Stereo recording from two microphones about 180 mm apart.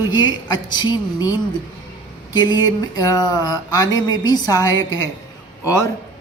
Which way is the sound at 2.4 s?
20° left (ahead or behind).